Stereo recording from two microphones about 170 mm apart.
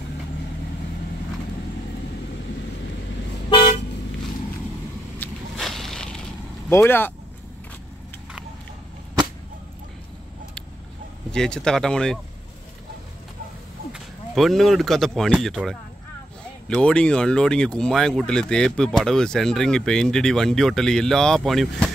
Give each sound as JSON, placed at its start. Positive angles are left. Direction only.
{"t": 3.4, "sound": "car", "side_deg": 30}
{"t": 5.2, "sound": "a sound", "side_deg": 5}
{"t": 6.7, "sound": "speech", "side_deg": 15}
{"t": 11.3, "sound": "speech", "side_deg": 5}
{"t": 13.9, "sound": "speech", "side_deg": 0}